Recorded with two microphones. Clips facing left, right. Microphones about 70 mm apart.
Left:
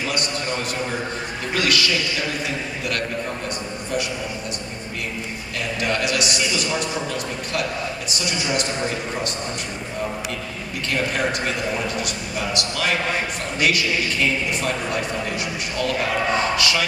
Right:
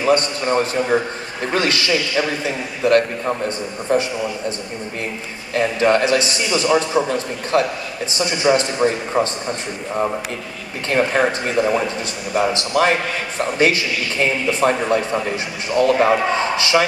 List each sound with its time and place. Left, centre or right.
0.0 s a man's voice: right
5.5 s a man's voice: right
10.9 s a man's voice: right